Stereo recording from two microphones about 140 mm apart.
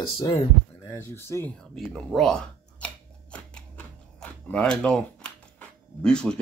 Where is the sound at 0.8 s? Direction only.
20° left (ahead or behind).